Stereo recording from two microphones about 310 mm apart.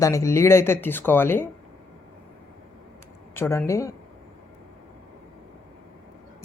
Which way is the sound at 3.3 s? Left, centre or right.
Centre.